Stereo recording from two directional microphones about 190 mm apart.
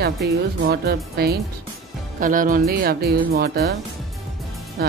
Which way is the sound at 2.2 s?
45° right (ahead or behind).